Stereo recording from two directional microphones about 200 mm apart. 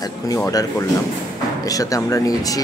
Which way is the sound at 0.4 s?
15° left (ahead or behind).